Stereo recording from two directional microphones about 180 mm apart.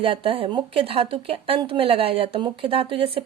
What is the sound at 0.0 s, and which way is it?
A woman's voice, 30° right (ahead or behind).